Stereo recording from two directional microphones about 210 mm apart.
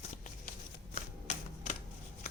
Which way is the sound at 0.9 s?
30° left (ahead or behind).